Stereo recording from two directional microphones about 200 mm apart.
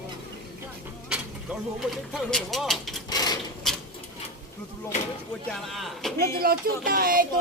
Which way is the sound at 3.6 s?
Centre (ahead or behind).